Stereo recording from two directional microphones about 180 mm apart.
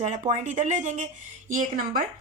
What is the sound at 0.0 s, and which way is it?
Speech, 40° right (ahead or behind).